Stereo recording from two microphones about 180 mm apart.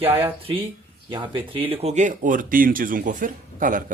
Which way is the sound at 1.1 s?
25° right (ahead or behind).